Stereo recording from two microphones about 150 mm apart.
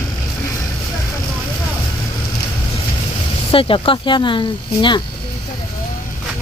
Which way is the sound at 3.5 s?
35° left (ahead or behind).